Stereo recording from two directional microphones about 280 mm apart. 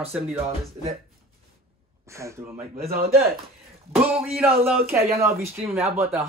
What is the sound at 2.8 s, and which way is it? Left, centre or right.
Speech, right.